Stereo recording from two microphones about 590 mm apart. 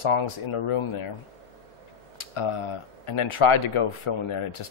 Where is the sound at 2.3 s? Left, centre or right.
Left.